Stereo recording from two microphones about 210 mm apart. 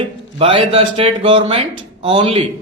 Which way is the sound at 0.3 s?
25° right (ahead or behind).